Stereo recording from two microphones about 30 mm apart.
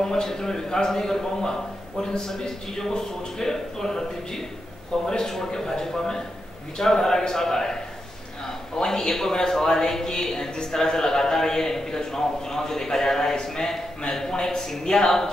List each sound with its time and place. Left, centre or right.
0.0 s speech: centre
5.2 s speech: centre
8.7 s speech: left